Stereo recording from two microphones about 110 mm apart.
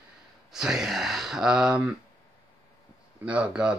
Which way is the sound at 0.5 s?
5° right (ahead or behind).